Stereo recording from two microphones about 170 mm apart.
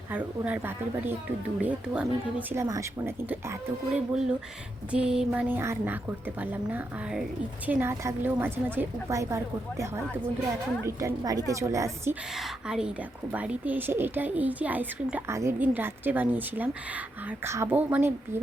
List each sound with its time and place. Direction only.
0.1 s speech: 10° right (ahead or behind)
12.4 s a woman's voice: 5° right (ahead or behind)